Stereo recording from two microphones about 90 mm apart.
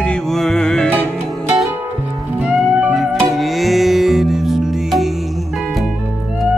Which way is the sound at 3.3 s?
Centre (ahead or behind).